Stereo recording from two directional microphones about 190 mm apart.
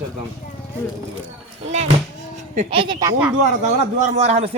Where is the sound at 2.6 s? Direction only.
30° right (ahead or behind).